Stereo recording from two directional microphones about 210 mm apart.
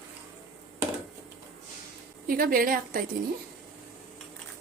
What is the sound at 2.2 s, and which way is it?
Speech, 40° right (ahead or behind).